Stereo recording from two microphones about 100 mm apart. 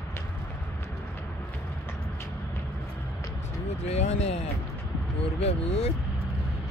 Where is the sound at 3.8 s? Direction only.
90° left.